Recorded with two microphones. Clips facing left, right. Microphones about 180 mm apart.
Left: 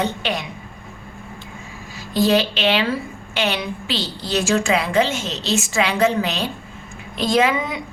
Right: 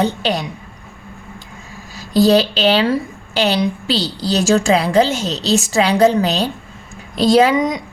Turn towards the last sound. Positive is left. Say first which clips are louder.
# right 6 dB
turn(degrees=-35)  # may be behind; listen again after turning